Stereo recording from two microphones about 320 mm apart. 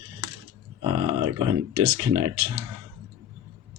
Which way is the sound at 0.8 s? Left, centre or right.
Right.